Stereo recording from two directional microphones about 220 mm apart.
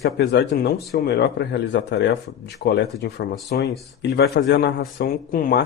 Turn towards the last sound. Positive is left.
turn(degrees=40)  # may be behind; listen again after turning